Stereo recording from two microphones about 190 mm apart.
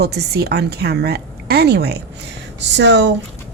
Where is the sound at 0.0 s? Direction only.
60° right (ahead or behind).